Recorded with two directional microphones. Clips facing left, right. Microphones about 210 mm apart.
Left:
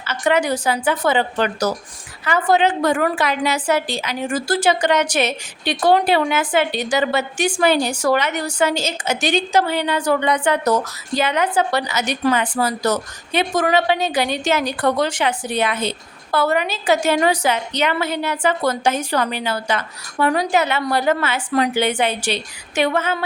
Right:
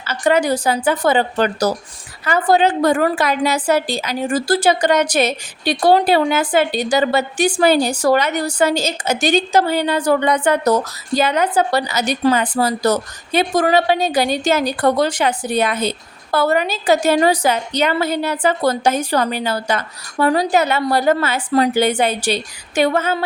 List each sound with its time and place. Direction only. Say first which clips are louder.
0.1 s a woman's voice: right 2 dB; 35° right (ahead or behind)